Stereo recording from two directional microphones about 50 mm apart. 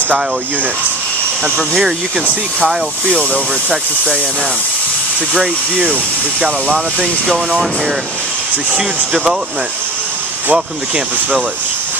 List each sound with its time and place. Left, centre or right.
3.1 s speech: left
6.7 s speech: centre
8.8 s speech: centre
10.5 s speech: right